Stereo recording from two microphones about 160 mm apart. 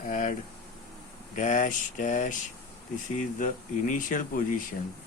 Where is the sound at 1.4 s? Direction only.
50° left (ahead or behind).